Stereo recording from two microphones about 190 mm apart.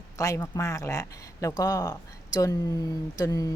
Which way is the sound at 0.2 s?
15° left (ahead or behind).